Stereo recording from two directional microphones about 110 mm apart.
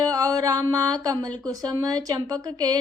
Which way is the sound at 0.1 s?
35° right (ahead or behind).